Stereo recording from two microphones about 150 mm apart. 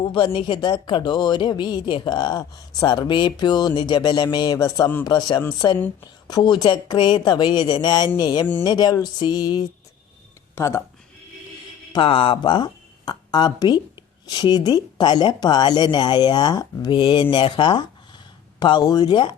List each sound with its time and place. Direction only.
0.0 s speech: 35° left (ahead or behind)
10.5 s speech: 15° left (ahead or behind)
11.9 s speech: 35° left (ahead or behind)